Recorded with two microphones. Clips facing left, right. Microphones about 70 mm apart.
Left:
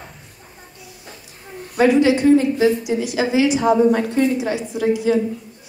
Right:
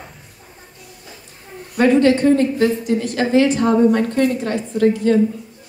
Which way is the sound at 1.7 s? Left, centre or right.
Centre.